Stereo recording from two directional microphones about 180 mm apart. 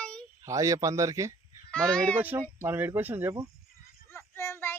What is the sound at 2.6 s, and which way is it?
Speech, 10° right (ahead or behind).